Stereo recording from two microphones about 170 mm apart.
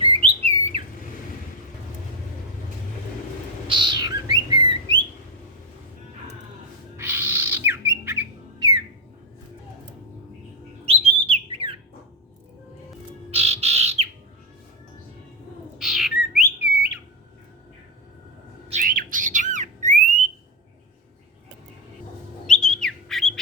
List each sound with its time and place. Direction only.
0.0 s bird: 30° right (ahead or behind)
3.7 s bird: 25° right (ahead or behind)
6.9 s bird: 15° right (ahead or behind)
10.8 s bird: 35° right (ahead or behind)
13.3 s bird: 35° right (ahead or behind)
15.8 s bird: centre (ahead or behind)
18.7 s bird: 55° right (ahead or behind)
22.4 s bird: 5° left (ahead or behind)